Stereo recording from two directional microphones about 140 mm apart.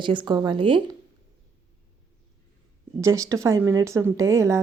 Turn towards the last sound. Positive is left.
turn(degrees=-20)  # may be behind; listen again after turning